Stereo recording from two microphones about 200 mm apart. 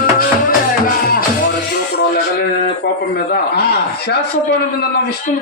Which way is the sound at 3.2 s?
50° left (ahead or behind).